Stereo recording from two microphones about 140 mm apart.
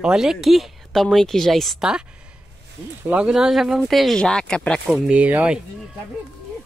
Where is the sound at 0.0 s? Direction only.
5° right (ahead or behind).